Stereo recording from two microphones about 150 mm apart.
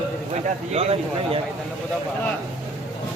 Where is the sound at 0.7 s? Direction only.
40° right (ahead or behind).